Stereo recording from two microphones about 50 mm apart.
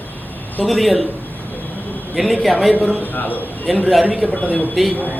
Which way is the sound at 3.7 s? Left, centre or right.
Centre.